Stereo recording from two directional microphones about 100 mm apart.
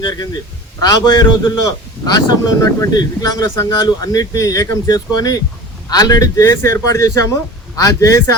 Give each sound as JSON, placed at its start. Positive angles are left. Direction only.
{"t": 0.8, "sound": "speech", "side_deg": 40}